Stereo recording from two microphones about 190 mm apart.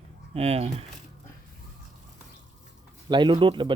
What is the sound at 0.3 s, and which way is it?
Speech, 35° right (ahead or behind).